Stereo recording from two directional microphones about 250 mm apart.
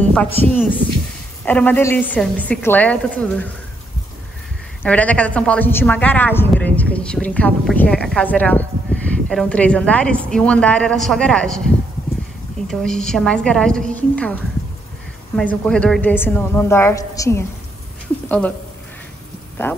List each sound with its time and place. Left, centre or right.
0.4 s a woman's voice: centre
4.8 s a woman's voice: centre